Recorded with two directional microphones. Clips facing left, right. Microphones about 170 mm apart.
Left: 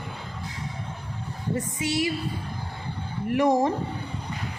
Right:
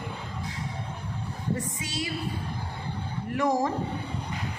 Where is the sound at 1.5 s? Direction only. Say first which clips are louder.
Left 8 dB; 20° left (ahead or behind).